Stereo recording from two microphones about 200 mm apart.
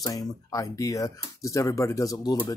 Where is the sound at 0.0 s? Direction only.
15° left (ahead or behind).